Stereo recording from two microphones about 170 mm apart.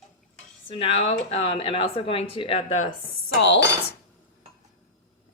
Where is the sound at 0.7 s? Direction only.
35° left (ahead or behind).